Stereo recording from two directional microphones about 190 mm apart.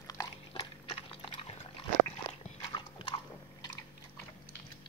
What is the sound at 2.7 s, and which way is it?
Biting, 25° left (ahead or behind).